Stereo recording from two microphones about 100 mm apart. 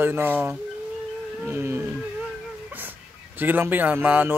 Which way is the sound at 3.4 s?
20° right (ahead or behind).